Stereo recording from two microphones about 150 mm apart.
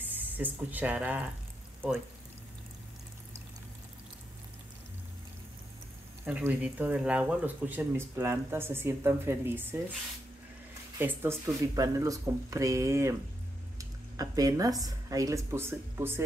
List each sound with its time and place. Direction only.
0.0 s speech: 10° right (ahead or behind)
6.2 s speech: 10° right (ahead or behind)
11.0 s speech: 15° right (ahead or behind)